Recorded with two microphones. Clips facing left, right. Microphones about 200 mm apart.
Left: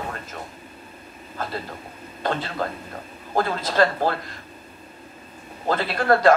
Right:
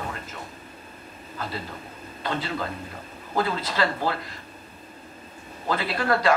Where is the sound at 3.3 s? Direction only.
45° left (ahead or behind).